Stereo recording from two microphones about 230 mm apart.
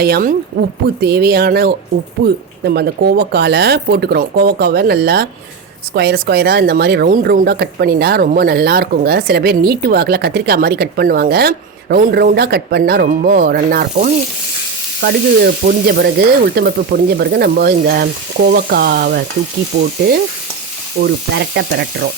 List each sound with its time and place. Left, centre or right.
0.0 s speech: right